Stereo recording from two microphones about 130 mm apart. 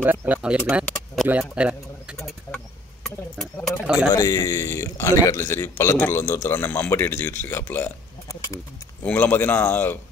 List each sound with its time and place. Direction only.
0.0 s speech: 15° right (ahead or behind)
2.1 s a sound: 5° left (ahead or behind)
3.5 s speech: 15° left (ahead or behind)
3.8 s speech: 10° right (ahead or behind)
4.1 s a man's voice: 25° left (ahead or behind)